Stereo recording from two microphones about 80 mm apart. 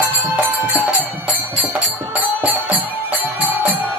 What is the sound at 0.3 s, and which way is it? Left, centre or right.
Music, right.